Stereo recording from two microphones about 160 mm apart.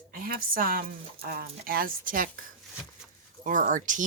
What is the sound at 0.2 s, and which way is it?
A woman's voice, 60° right (ahead or behind).